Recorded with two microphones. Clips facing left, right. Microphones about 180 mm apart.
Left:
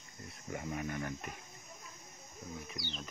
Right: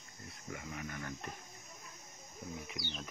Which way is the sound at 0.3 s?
30° left (ahead or behind).